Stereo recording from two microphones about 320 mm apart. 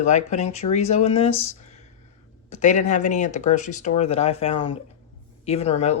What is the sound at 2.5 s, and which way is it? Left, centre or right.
Speech, left.